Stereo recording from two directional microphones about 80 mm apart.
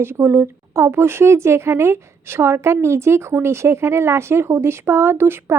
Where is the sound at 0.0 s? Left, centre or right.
Right.